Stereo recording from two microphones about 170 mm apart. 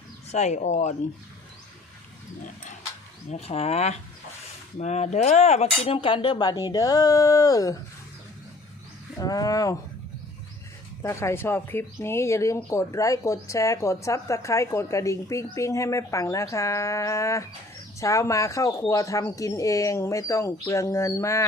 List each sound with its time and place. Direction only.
0.3 s speech: 45° left (ahead or behind)
3.2 s speech: 40° left (ahead or behind); by 7.8 s 20° left (ahead or behind)
9.2 s speech: 20° left (ahead or behind)
11.0 s speech: 15° left (ahead or behind)